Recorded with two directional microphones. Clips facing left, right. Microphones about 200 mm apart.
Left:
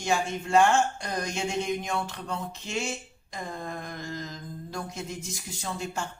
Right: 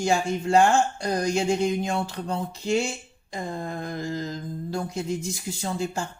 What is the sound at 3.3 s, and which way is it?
Mantra, 30° right (ahead or behind).